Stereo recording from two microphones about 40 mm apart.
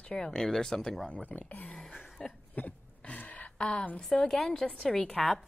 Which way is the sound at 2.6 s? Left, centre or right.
Left.